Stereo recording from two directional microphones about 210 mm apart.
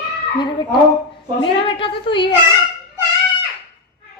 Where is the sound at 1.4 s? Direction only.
25° left (ahead or behind).